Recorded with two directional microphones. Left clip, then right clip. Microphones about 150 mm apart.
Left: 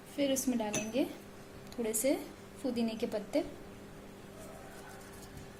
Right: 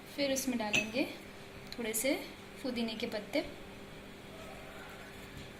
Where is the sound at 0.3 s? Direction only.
50° left (ahead or behind).